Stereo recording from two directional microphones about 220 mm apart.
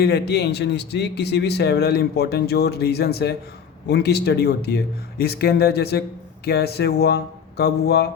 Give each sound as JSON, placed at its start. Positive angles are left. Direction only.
{"t": 0.0, "sound": "a man's voice", "side_deg": 50}